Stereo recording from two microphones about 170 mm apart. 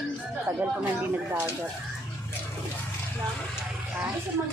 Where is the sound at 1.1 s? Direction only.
10° right (ahead or behind).